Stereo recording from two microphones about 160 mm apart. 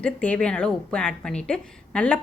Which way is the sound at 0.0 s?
10° left (ahead or behind).